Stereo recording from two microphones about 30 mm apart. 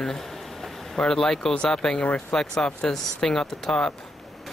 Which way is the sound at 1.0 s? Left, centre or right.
Centre.